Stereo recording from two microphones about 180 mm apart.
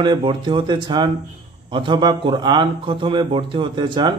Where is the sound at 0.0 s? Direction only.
25° right (ahead or behind).